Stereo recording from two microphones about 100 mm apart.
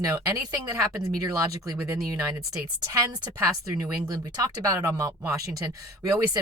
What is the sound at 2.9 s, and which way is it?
Speech, 40° right (ahead or behind).